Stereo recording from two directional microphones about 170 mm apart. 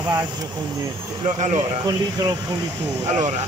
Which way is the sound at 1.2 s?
45° right (ahead or behind).